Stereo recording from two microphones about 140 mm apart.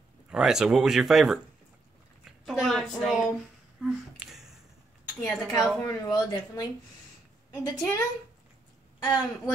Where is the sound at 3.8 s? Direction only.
5° right (ahead or behind).